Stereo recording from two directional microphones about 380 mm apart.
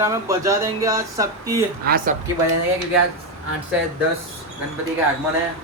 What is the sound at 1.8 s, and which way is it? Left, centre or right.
Speech, right.